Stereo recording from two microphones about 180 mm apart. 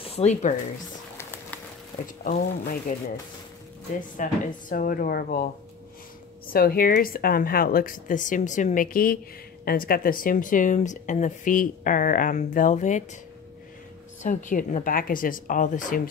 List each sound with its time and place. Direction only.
0.0 s speech: 35° left (ahead or behind)
1.1 s a sound: 10° left (ahead or behind)
2.2 s speech: 55° left (ahead or behind)
4.2 s speech: 50° left (ahead or behind)
6.5 s speech: 55° left (ahead or behind)
14.2 s speech: 45° left (ahead or behind)